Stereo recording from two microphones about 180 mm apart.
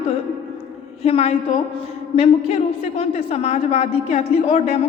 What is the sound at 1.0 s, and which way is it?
A woman's voice, 35° left (ahead or behind).